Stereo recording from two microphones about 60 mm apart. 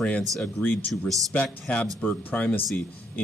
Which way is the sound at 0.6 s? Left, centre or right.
Left.